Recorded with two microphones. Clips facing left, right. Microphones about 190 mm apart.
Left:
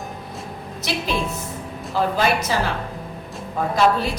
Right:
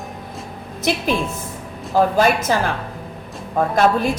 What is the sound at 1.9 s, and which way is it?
Speech, 50° right (ahead or behind).